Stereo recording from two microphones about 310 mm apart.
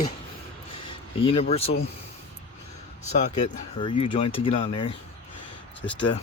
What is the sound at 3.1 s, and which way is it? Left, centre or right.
Speech, left.